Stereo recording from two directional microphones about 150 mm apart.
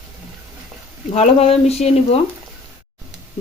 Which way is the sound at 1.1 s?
45° left (ahead or behind).